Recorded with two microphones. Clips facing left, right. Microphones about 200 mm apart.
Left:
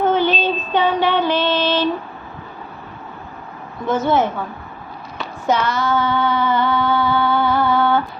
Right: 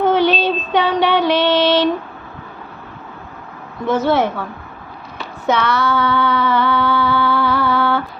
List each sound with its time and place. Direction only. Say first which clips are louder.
0.0 s child singing: right 2 dB; 70° right (ahead or behind)
3.8 s a woman's voice: right 1 dB; 65° right (ahead or behind)
5.5 s a sound: right 1 dB; 65° right (ahead or behind)